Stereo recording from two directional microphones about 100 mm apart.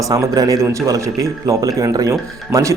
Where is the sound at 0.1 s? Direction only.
35° right (ahead or behind).